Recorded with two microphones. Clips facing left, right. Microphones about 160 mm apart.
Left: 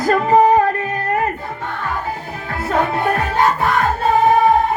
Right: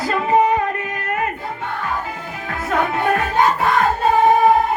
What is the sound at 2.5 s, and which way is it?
Music, 35° left (ahead or behind).